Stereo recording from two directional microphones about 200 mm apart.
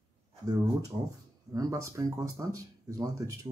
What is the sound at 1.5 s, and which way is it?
Speech, 15° right (ahead or behind).